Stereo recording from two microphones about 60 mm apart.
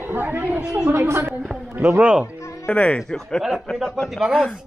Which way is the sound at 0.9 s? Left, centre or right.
Right.